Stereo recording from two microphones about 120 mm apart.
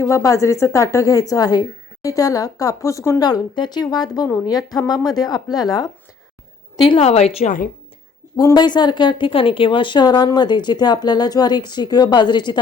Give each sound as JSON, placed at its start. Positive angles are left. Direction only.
{"t": 0.0, "sound": "a woman's voice", "side_deg": 25}
{"t": 3.2, "sound": "a woman's voice", "side_deg": 35}
{"t": 7.0, "sound": "a woman's voice", "side_deg": 60}
{"t": 8.4, "sound": "a woman's voice", "side_deg": 35}